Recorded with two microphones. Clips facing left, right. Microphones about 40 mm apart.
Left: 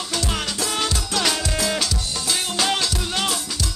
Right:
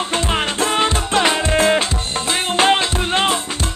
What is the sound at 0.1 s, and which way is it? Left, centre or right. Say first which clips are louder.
Music: right 3 dB; right.